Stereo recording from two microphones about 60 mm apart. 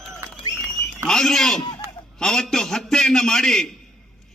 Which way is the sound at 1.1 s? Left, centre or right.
Centre.